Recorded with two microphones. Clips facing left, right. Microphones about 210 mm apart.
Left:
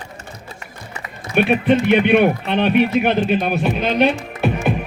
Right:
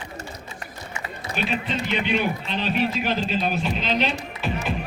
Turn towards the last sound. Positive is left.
turn(degrees=60)  # may be behind; listen again after turning